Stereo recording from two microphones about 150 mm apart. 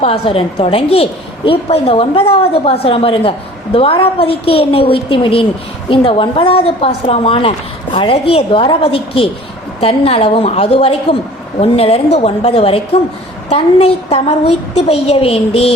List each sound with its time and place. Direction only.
0.0 s a woman's voice: 40° left (ahead or behind)